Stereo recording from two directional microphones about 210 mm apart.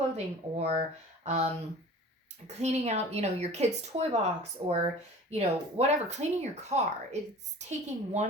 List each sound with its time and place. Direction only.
0.5 s speech: 30° right (ahead or behind)